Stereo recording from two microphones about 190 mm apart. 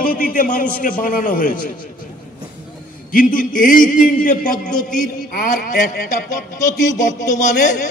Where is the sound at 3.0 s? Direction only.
45° left (ahead or behind).